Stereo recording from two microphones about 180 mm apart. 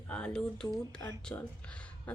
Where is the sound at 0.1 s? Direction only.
5° left (ahead or behind).